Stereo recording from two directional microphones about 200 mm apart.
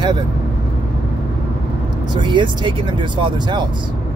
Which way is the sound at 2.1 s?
25° right (ahead or behind).